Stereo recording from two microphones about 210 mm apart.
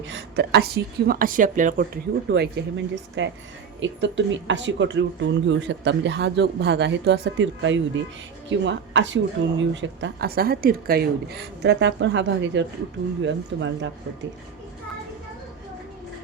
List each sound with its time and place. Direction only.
0.1 s speech: 55° right (ahead or behind)
2.3 s speech: 55° right (ahead or behind)